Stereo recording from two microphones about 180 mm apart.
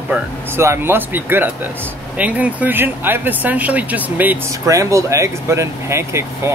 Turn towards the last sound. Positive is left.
turn(degrees=-15)  # may be behind; listen again after turning